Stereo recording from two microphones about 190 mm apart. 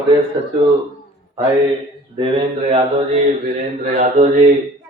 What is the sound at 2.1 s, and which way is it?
Mantra, 30° right (ahead or behind).